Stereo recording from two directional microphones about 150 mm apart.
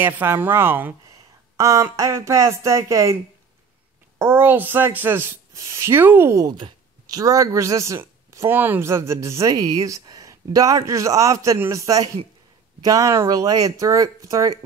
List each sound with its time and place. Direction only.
0.0 s speech: 15° right (ahead or behind)
4.2 s a woman's voice: 15° right (ahead or behind)